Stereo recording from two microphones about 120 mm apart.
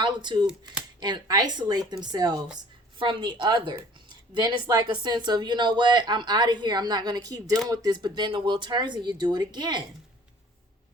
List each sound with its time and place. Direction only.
0.0 s speech: 35° right (ahead or behind)